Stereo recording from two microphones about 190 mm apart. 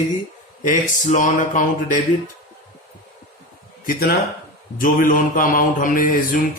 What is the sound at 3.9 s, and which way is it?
A man's voice, 50° left (ahead or behind).